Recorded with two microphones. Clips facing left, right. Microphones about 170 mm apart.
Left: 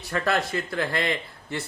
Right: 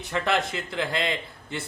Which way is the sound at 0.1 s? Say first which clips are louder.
Left 1 dB; 20° right (ahead or behind).